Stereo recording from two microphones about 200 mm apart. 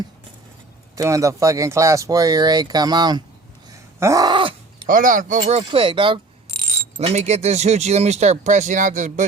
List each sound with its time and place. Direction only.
0.9 s speech: 15° right (ahead or behind)
4.0 s groan: 15° right (ahead or behind)
4.9 s speech: 40° right (ahead or behind)